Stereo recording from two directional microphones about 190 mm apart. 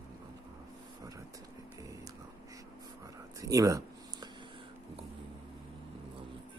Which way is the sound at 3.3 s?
15° right (ahead or behind).